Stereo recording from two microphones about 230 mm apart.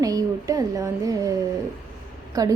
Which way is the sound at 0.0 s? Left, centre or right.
Centre.